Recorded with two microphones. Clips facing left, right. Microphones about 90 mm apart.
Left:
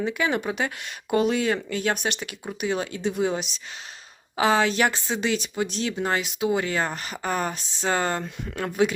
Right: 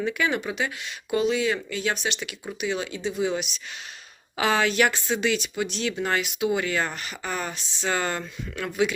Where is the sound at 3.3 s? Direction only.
35° left (ahead or behind).